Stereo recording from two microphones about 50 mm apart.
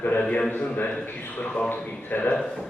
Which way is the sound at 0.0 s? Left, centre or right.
Left.